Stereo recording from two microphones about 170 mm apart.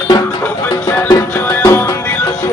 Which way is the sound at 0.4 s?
10° left (ahead or behind).